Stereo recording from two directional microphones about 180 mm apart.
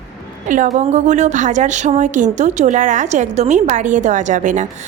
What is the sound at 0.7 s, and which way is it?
A woman's voice, 40° right (ahead or behind).